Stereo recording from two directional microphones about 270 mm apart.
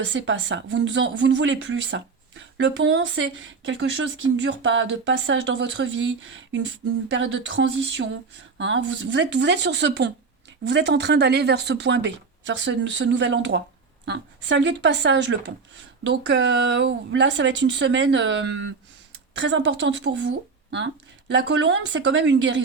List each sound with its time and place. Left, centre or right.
0.0 s speech: right